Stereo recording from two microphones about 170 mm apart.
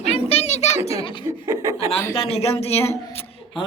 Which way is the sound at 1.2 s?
20° right (ahead or behind).